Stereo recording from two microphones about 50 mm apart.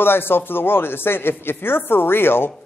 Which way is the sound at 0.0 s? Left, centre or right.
Left.